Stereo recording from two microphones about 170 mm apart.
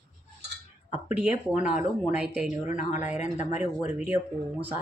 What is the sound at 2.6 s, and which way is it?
Speech, 45° left (ahead or behind).